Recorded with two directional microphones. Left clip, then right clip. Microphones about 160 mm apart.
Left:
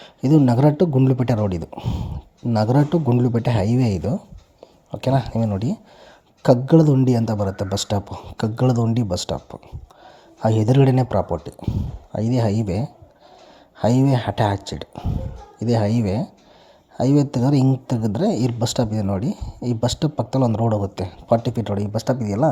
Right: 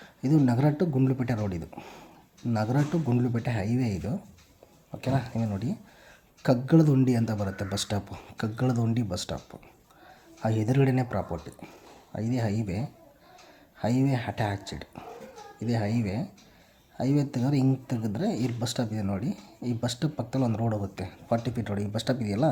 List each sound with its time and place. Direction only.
0.0 s a man's voice: 35° left (ahead or behind)
21.9 s speech: 15° left (ahead or behind)